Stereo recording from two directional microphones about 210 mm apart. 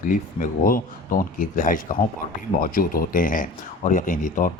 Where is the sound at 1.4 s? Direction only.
40° left (ahead or behind).